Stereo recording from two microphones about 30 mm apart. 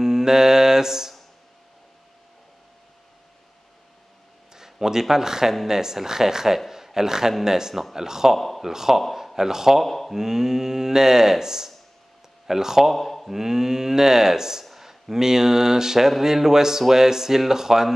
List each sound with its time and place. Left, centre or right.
0.0 s mantra: centre
4.6 s a man's voice: centre
8.4 s speech: centre
8.6 s a man's voice: centre
9.8 s speech: centre
10.1 s speech: centre
12.9 s speech: centre
13.3 s speech: centre